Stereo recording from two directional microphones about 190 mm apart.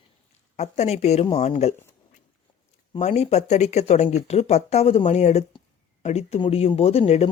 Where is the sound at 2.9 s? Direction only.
35° left (ahead or behind).